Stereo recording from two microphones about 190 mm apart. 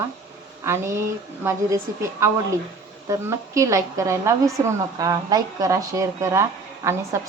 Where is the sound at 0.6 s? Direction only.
15° right (ahead or behind).